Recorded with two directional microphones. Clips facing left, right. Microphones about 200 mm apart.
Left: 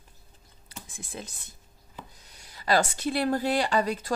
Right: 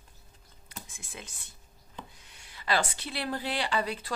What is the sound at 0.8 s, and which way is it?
A woman's voice, 35° left (ahead or behind).